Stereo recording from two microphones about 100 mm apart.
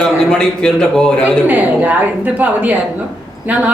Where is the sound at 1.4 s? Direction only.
15° right (ahead or behind).